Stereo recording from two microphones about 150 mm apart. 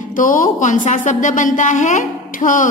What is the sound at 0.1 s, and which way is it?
A man's voice, 65° left (ahead or behind).